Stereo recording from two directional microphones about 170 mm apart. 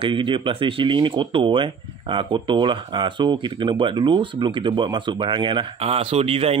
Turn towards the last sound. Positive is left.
turn(degrees=-35)  # may be behind; listen again after turning